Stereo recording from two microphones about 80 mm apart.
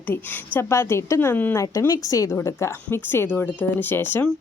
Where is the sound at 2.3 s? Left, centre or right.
Left.